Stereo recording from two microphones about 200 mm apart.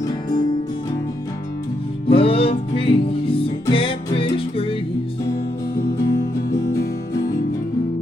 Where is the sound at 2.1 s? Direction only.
30° left (ahead or behind).